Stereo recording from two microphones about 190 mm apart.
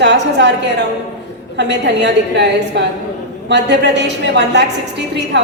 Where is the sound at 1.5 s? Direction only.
65° right (ahead or behind).